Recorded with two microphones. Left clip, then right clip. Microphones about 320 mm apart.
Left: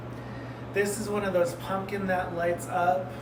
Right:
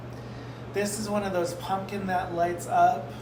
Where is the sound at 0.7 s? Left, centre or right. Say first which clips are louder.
Left 1 dB; centre.